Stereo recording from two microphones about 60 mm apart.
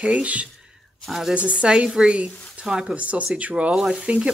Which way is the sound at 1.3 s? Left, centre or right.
Right.